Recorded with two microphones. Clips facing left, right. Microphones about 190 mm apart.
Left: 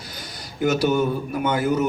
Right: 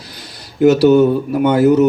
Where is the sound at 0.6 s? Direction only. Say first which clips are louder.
Right 11 dB; 70° right (ahead or behind).